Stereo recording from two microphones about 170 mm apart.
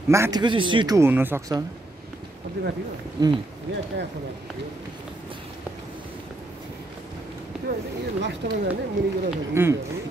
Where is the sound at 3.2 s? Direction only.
25° right (ahead or behind).